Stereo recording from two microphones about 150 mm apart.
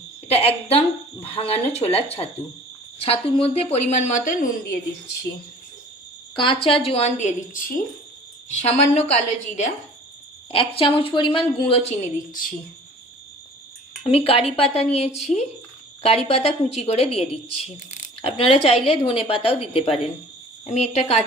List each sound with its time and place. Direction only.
0.3 s a sound: 40° left (ahead or behind)
1.2 s a woman's voice: 40° left (ahead or behind); by 4.8 s 65° left (ahead or behind)
6.3 s a woman's voice: 35° left (ahead or behind); by 9.7 s 50° left (ahead or behind)
10.5 s a woman's voice: 40° left (ahead or behind)
14.0 s a woman's voice: 40° left (ahead or behind)